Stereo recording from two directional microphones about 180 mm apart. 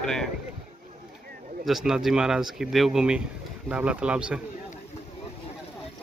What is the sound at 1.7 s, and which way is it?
Speech, centre (ahead or behind).